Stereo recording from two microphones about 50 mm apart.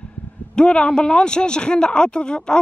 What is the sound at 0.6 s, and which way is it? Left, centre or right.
Speech, centre.